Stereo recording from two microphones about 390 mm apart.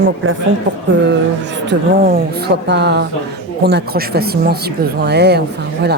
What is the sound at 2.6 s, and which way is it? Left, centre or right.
Speech, right.